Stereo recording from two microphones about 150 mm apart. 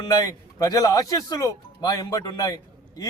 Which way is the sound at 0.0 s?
25° left (ahead or behind).